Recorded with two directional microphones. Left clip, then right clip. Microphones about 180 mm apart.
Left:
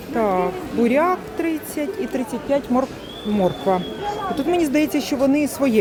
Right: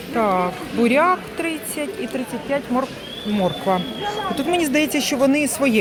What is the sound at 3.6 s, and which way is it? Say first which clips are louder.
Speech: even; 10° left (ahead or behind).